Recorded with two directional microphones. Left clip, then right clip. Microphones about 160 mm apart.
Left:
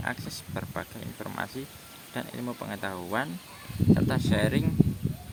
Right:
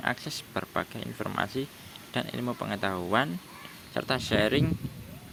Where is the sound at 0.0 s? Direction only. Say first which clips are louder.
Right 3 dB; 20° right (ahead or behind).